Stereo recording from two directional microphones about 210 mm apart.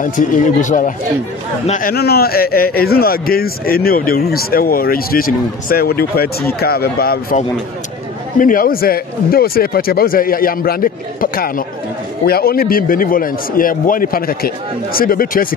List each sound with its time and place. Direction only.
0.0 s a man's voice: 35° left (ahead or behind)